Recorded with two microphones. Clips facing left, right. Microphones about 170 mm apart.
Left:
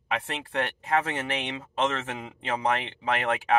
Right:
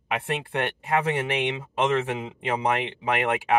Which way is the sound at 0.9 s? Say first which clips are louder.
Right 3 dB; 15° right (ahead or behind).